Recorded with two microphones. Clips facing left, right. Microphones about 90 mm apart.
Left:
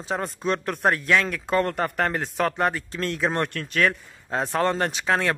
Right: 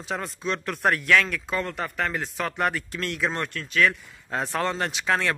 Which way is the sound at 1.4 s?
50° left (ahead or behind).